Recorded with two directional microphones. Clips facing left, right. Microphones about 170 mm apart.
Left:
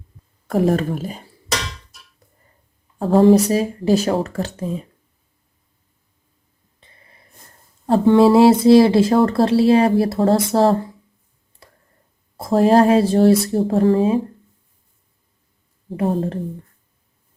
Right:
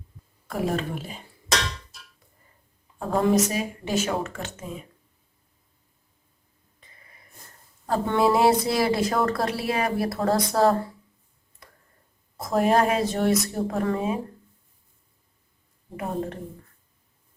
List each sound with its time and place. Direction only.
0.4 s speech: 45° left (ahead or behind)
3.0 s speech: 30° left (ahead or behind)
6.7 s a sound: 30° left (ahead or behind)
7.9 s speech: 25° left (ahead or behind)
11.6 s a sound: 30° left (ahead or behind)
12.4 s speech: 30° left (ahead or behind)
15.9 s speech: 30° left (ahead or behind)